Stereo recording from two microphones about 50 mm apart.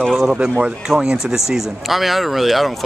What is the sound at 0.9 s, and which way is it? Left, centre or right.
A man's voice, centre.